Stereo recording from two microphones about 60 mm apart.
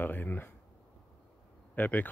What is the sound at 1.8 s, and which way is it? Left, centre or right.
Speech, left.